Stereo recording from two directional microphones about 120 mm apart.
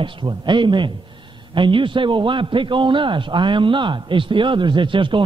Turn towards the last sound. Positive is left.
turn(degrees=-45)  # may be behind; listen again after turning